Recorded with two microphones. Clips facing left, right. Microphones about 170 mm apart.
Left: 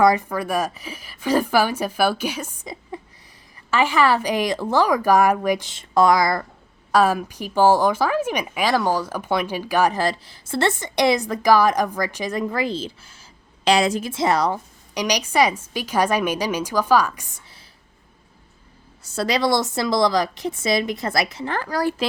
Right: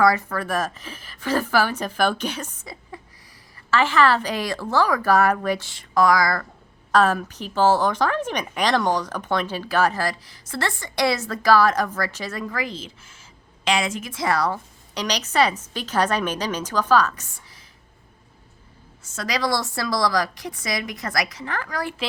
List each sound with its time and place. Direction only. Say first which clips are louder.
0.0 s speech: left 2 dB; 20° left (ahead or behind)
2.9 s a sound: left 7 dB; 20° left (ahead or behind)
3.7 s speech: left 1 dB; 15° left (ahead or behind)
6.9 s speech: left 1 dB; 10° left (ahead or behind)
19.0 s a woman's voice: left 4 dB; 30° left (ahead or behind)